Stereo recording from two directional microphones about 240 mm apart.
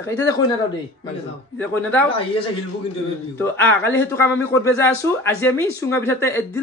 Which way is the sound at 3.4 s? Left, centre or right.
Centre.